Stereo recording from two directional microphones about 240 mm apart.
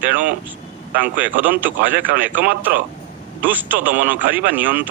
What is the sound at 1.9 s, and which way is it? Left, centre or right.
Speech, right.